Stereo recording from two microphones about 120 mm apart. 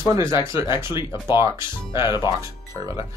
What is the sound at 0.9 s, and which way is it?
Speech, 40° left (ahead or behind).